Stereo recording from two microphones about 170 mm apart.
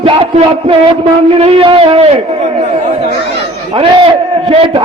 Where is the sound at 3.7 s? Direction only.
30° right (ahead or behind).